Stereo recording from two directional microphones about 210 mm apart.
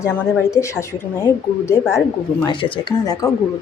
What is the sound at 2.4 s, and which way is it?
Speech, 25° left (ahead or behind).